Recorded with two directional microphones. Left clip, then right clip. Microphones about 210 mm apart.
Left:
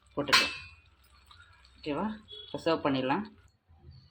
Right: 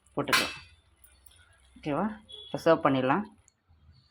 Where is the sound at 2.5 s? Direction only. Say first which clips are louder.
Right 5 dB; 20° right (ahead or behind).